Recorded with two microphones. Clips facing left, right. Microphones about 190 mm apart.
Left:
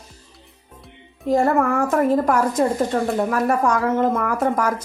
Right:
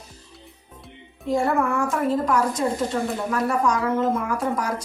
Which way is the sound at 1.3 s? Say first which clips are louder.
Left 4 dB; 45° left (ahead or behind).